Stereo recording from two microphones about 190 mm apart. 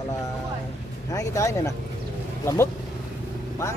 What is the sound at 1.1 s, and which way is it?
Speech, 15° left (ahead or behind).